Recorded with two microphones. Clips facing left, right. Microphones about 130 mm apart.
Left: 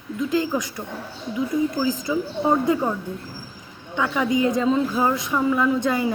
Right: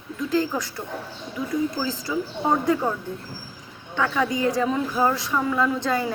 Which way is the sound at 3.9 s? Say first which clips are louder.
Left 2 dB; 15° left (ahead or behind).